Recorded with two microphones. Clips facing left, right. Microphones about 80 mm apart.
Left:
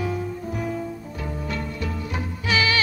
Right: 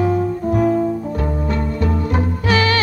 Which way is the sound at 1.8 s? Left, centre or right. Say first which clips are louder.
Right 10 dB; right.